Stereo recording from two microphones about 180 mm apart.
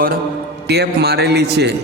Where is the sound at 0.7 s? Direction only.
65° right (ahead or behind).